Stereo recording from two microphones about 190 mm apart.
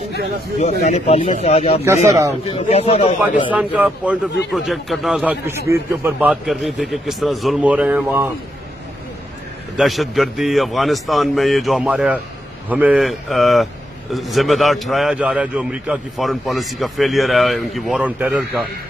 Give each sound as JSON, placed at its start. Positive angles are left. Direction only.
{"t": 0.8, "sound": "a man's voice", "side_deg": 35}
{"t": 3.5, "sound": "a man's voice", "side_deg": -5}
{"t": 5.5, "sound": "a man's voice", "side_deg": -15}
{"t": 9.8, "sound": "a man's voice", "side_deg": 0}